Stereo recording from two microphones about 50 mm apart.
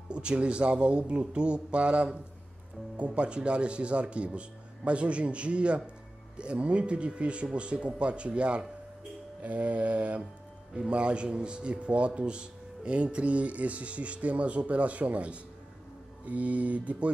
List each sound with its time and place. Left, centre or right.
0.1 s a man's voice: right
3.2 s a man's voice: right
10.7 s a man's voice: centre